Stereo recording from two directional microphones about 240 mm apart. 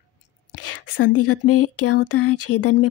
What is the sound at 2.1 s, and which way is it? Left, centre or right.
Speech, left.